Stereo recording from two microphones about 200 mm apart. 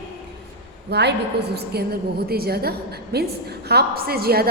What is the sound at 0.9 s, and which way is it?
A woman's voice, 55° right (ahead or behind).